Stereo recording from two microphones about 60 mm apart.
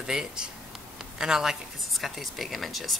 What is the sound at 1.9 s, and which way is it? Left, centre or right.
Speech, centre.